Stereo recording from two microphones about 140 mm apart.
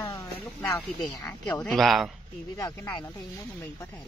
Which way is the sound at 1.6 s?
Centre (ahead or behind).